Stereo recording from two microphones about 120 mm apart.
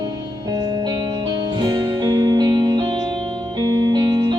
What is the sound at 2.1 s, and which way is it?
Music, 35° right (ahead or behind).